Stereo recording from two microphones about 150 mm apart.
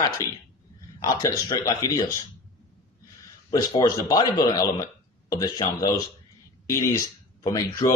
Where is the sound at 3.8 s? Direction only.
25° left (ahead or behind).